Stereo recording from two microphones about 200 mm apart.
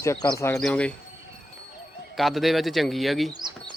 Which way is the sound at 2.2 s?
Centre (ahead or behind).